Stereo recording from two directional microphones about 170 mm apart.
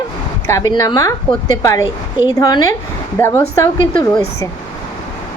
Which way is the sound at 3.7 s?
30° left (ahead or behind).